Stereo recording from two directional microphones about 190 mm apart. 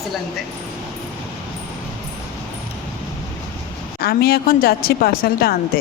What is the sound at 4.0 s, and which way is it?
A woman's voice, 55° left (ahead or behind).